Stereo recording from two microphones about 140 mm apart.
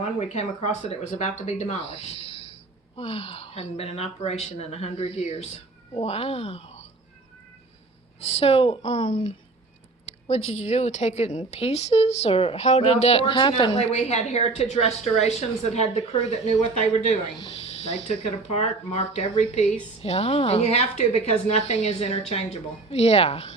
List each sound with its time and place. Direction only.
0.0 s speech: 50° left (ahead or behind)
8.2 s speech: 45° left (ahead or behind)
10.2 s speech: 50° left (ahead or behind); by 13.7 s 35° left (ahead or behind)
13.7 s speech: 50° left (ahead or behind)